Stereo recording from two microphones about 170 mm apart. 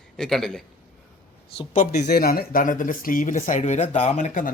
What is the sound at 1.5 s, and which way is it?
Speech, 35° left (ahead or behind).